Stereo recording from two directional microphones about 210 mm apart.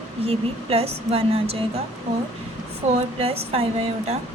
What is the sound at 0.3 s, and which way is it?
Speech, 30° right (ahead or behind).